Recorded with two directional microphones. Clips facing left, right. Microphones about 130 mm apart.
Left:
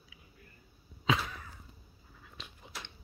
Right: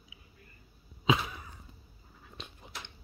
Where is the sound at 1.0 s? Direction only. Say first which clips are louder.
Right 3 dB; 15° right (ahead or behind).